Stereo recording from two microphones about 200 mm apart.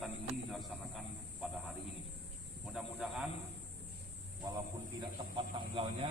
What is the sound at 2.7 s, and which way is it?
Speech, centre (ahead or behind).